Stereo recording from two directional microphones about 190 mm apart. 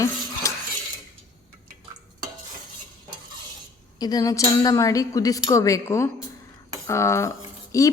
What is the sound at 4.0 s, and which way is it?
A woman's voice, 20° left (ahead or behind).